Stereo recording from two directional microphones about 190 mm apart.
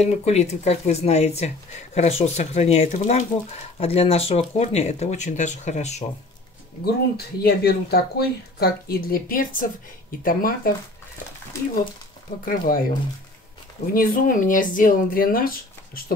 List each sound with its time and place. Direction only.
0.0 s speech: 35° left (ahead or behind)
6.8 s speech: 55° left (ahead or behind)
12.4 s speech: 50° left (ahead or behind)
13.9 s speech: 45° left (ahead or behind)